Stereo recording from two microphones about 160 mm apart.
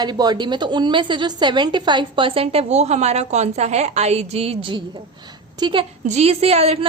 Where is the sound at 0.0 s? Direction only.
25° right (ahead or behind).